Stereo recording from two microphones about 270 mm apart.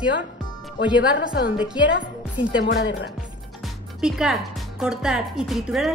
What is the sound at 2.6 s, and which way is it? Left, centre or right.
Speech, left.